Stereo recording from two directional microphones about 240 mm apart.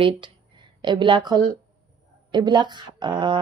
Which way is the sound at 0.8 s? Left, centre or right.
Centre.